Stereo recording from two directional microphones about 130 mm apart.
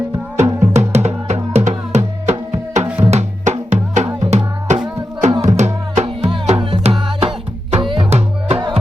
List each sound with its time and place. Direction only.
0.3 s music: 60° right (ahead or behind)
2.8 s music: 15° right (ahead or behind)
3.1 s music: 60° right (ahead or behind)